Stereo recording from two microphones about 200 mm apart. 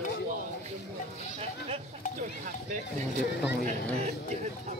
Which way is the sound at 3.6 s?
35° right (ahead or behind).